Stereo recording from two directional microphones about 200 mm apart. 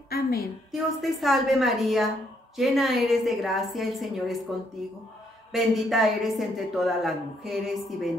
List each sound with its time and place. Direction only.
0.1 s a sound: 50° left (ahead or behind)
0.7 s a woman's voice: centre (ahead or behind)
5.5 s a woman's voice: centre (ahead or behind)